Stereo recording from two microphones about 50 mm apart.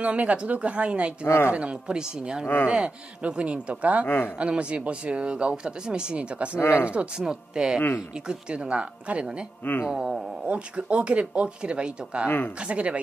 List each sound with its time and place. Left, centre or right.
0.0 s speech: right
1.2 s speech: left
1.5 s speech: right
2.4 s speech: left
2.7 s speech: right
4.0 s speech: left
4.4 s speech: right
6.6 s speech: left
7.2 s speech: centre
9.8 s speech: centre
10.4 s speech: right